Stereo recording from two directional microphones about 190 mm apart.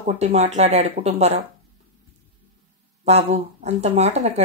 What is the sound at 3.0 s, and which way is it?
Speech, 35° right (ahead or behind).